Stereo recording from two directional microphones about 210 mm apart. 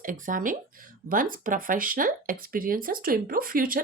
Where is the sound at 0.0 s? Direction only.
40° right (ahead or behind).